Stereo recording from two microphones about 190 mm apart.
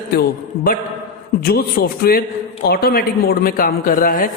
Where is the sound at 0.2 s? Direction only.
50° left (ahead or behind).